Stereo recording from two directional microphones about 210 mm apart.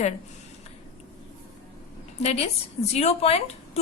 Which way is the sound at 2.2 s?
30° left (ahead or behind).